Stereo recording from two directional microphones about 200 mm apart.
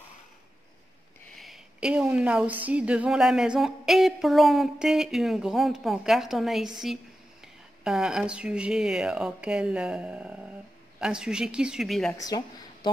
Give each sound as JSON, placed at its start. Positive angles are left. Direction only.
{"t": 1.3, "sound": "a woman's voice", "side_deg": 0}
{"t": 7.8, "sound": "a woman's voice", "side_deg": 0}
{"t": 12.1, "sound": "speech", "side_deg": 15}